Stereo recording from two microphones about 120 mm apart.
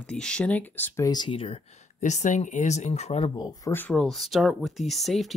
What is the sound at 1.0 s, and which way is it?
Speech, 35° left (ahead or behind).